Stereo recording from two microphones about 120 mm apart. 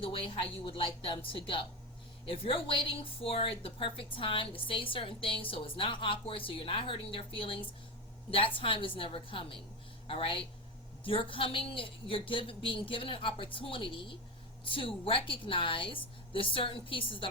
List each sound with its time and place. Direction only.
0.6 s speech: 45° left (ahead or behind)